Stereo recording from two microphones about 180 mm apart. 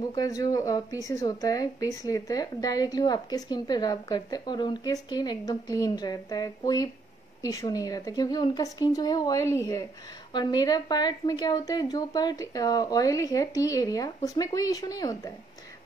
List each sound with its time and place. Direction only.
0.1 s speech: 20° left (ahead or behind)